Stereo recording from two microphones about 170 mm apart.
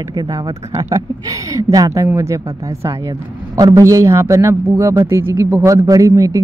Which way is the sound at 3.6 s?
20° right (ahead or behind).